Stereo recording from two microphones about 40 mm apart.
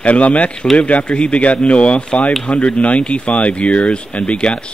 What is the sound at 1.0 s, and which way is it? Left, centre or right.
A man's voice, left.